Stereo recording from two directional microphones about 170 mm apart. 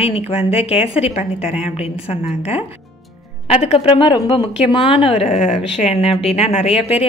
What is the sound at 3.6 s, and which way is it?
Speech, 35° left (ahead or behind).